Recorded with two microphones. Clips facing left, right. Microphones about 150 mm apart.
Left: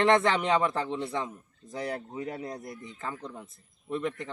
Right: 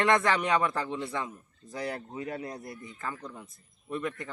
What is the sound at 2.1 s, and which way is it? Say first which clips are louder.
Speech: left 1 dB; 5° left (ahead or behind).